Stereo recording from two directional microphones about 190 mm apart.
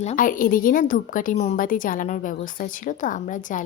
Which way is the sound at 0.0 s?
40° left (ahead or behind).